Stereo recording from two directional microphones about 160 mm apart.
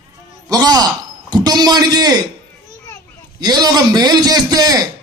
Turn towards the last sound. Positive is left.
turn(degrees=-25)  # may be behind; listen again after turning